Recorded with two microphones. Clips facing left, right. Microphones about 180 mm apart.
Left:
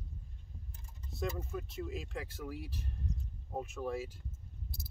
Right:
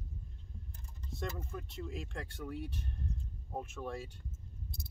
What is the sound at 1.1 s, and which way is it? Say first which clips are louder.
Speech: left 3 dB; 5° left (ahead or behind).